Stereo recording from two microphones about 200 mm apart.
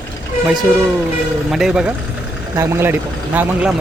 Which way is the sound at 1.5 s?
Centre (ahead or behind).